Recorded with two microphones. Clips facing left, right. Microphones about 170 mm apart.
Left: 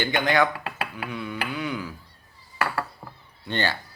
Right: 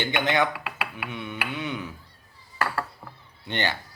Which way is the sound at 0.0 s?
20° right (ahead or behind).